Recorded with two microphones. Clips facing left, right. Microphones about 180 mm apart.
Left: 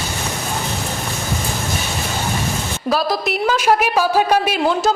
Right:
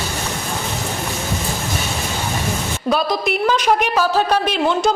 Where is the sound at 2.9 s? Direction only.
Centre (ahead or behind).